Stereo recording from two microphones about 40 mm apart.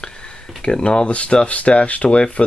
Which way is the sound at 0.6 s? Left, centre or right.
Left.